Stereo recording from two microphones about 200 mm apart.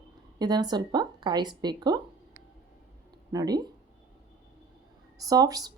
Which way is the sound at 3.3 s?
20° right (ahead or behind).